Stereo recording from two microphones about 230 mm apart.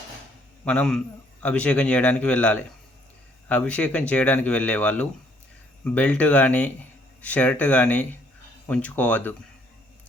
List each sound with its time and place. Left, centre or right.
0.6 s a man's voice: centre